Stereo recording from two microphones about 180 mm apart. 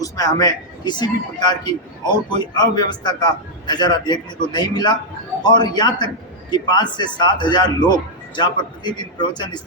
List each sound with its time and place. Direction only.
0.0 s a man's voice: 20° left (ahead or behind)